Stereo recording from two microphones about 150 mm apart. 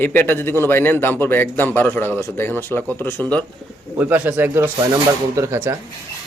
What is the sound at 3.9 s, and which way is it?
Speech, 10° right (ahead or behind).